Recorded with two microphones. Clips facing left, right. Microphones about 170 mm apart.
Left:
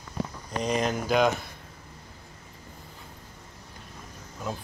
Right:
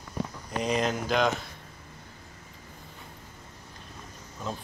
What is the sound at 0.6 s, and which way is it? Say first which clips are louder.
Speech: left 1 dB; centre (ahead or behind).